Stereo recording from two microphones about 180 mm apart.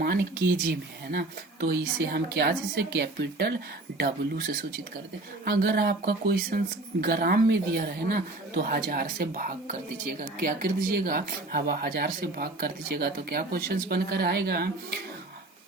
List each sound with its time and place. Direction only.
0.0 s speech: 55° right (ahead or behind)
1.6 s a woman's voice: 60° right (ahead or behind)